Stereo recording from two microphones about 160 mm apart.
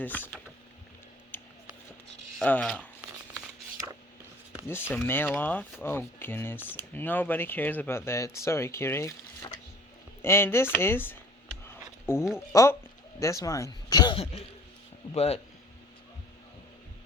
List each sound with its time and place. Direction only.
0.0 s speech: 10° left (ahead or behind)
1.3 s a sound: 15° left (ahead or behind)
2.4 s speech: 5° left (ahead or behind)
5.0 s speech: 10° left (ahead or behind); by 15.4 s 40° left (ahead or behind)